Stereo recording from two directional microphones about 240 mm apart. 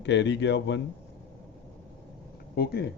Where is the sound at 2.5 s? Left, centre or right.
Left.